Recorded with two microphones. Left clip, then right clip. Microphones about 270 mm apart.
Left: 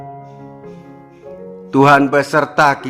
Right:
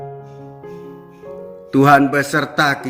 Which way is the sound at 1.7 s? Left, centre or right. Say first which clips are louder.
Left 2 dB; centre.